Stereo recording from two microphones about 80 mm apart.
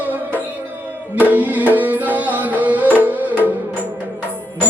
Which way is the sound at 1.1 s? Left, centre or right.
Right.